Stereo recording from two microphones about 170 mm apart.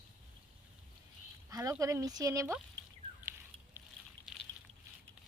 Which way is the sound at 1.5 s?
20° right (ahead or behind).